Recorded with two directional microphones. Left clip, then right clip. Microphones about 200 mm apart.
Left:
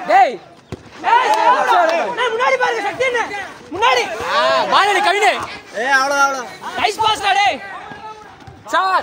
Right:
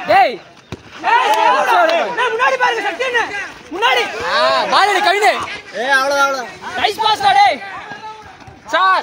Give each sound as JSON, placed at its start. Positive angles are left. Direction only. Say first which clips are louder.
{"t": 0.1, "sound": "chop", "louder": "even", "side_deg": -40}
{"t": 1.0, "sound": "chatter", "louder": "even", "side_deg": -30}
{"t": 3.7, "sound": "speech", "louder": "even", "side_deg": -50}
{"t": 4.3, "sound": "speech", "louder": "even", "side_deg": -20}
{"t": 5.8, "sound": "speech", "louder": "even", "side_deg": -40}
{"t": 8.6, "sound": "speech", "louder": "right 3 dB", "side_deg": 50}